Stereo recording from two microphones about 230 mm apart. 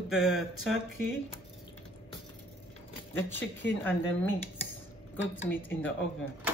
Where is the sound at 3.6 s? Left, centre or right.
Centre.